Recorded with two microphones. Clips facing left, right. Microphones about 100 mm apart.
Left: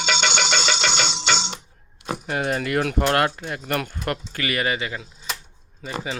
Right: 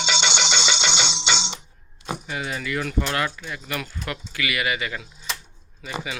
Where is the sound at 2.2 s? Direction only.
55° left (ahead or behind).